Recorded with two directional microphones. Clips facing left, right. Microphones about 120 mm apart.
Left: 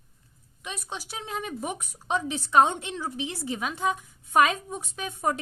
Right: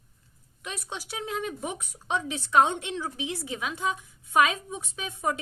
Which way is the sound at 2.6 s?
35° left (ahead or behind).